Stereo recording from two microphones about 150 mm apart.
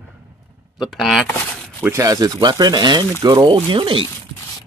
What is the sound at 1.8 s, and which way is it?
Speech, 20° right (ahead or behind).